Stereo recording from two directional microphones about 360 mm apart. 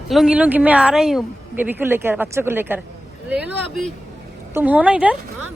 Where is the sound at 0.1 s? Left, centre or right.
Centre.